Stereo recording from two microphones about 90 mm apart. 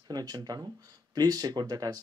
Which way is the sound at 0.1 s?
45° right (ahead or behind).